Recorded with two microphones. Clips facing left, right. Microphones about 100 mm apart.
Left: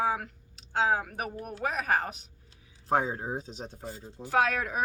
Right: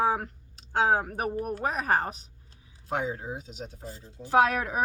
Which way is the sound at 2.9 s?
35° left (ahead or behind).